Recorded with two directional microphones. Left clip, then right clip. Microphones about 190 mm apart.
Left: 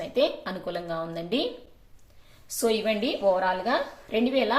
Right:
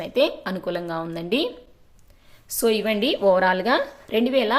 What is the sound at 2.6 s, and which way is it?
A woman's voice, 35° right (ahead or behind).